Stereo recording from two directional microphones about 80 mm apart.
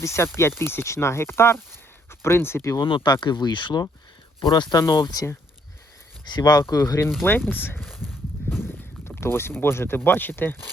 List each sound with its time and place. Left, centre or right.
0.0 s speech: left
1.7 s a sound: left
2.8 s speech: left
4.4 s speech: left
6.2 s speech: left
7.2 s speech: left
7.8 s a sound: centre
8.6 s speech: left